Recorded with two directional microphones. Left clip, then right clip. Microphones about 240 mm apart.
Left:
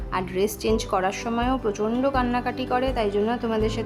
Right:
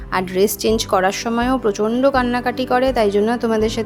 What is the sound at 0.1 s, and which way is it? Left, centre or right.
A woman's voice, right.